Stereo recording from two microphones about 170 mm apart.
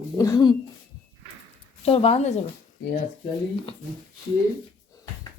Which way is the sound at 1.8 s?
35° left (ahead or behind).